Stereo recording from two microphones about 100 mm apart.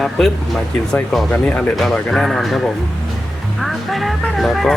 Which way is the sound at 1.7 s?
5° left (ahead or behind).